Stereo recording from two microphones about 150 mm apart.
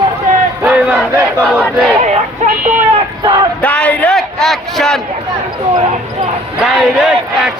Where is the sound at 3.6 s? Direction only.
10° left (ahead or behind).